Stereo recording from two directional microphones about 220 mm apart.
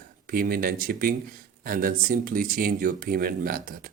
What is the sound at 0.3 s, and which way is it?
Speech, 40° right (ahead or behind).